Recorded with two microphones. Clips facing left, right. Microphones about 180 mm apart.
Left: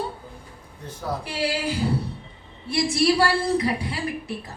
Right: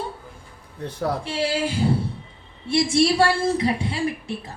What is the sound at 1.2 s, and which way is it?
A woman's voice, 25° right (ahead or behind).